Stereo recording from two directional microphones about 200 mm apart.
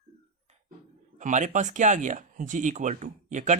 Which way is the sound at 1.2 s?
40° right (ahead or behind).